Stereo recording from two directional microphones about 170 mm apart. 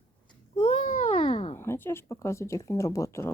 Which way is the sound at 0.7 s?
50° left (ahead or behind).